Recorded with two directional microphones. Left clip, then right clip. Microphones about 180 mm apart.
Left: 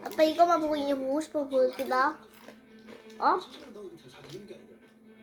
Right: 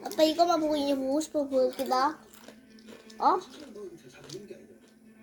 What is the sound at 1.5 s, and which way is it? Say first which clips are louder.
Speech: left 2 dB; 20° right (ahead or behind).